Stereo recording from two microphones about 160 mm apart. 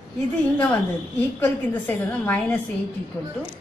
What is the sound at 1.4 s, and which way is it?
A woman's voice, 10° left (ahead or behind).